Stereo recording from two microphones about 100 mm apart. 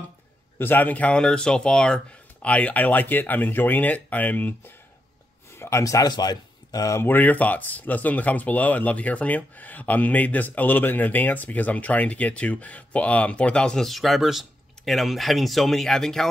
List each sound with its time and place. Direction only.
0.6 s speech: 20° left (ahead or behind)
5.6 s speech: 30° left (ahead or behind)
7.1 s speech: 15° left (ahead or behind)